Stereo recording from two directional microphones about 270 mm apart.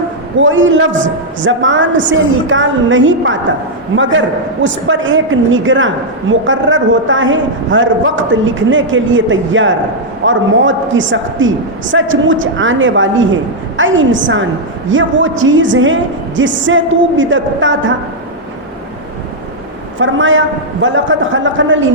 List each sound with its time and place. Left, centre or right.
0.3 s a woman's voice: right
4.6 s a woman's voice: right
20.0 s a woman's voice: right